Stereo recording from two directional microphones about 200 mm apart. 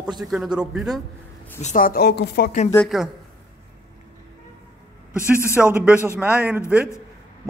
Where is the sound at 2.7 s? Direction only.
Centre (ahead or behind).